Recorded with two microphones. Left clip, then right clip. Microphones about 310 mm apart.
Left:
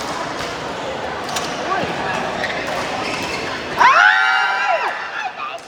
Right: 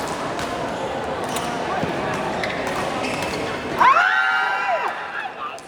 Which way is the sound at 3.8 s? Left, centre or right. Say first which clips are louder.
Left 4 dB; left.